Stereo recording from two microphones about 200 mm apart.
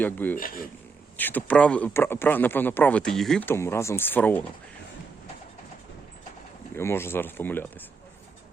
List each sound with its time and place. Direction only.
0.0 s speech: 10° left (ahead or behind)
0.3 s speech: 45° left (ahead or behind)
1.1 s speech: 10° left (ahead or behind)
6.7 s speech: 10° left (ahead or behind)